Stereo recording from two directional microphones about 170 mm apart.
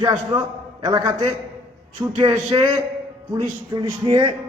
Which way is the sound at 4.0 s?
25° right (ahead or behind).